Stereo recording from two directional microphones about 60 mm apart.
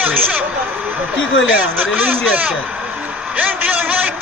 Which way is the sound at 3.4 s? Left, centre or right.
Right.